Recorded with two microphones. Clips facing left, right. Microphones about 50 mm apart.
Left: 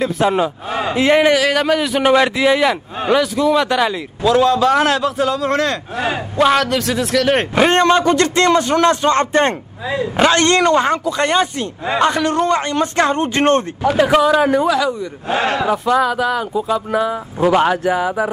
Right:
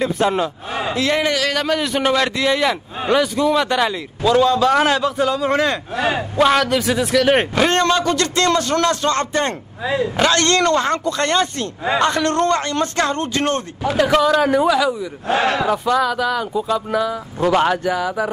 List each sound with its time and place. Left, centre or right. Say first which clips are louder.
0.0 s a man's voice: left 2 dB; centre
0.9 s a man's voice: left 7 dB; left
1.4 s a man's voice: left 4 dB; centre
7.5 s a man's voice: left 4 dB; centre
13.9 s a man's voice: left 2 dB; centre
14.7 s a man's voice: even; centre
15.6 s a man's voice: left 2 dB; centre
17.9 s a man's voice: left 3 dB; centre